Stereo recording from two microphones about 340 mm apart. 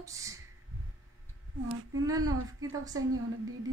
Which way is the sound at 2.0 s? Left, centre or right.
Centre.